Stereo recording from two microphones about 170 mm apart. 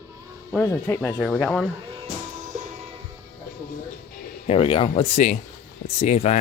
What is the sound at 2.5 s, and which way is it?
Music, 45° right (ahead or behind).